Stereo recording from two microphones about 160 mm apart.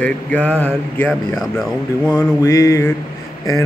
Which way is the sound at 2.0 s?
20° left (ahead or behind).